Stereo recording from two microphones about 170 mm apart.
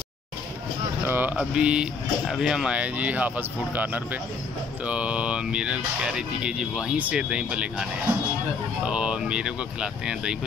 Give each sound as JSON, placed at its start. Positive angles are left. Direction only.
{"t": 1.0, "sound": "speech", "side_deg": -10}
{"t": 8.8, "sound": "speech", "side_deg": -5}